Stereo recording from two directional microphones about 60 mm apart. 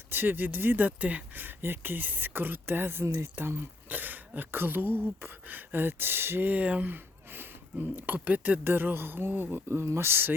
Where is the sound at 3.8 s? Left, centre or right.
Right.